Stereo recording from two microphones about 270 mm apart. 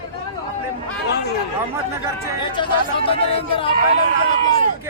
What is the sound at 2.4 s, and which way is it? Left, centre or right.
Speech, centre.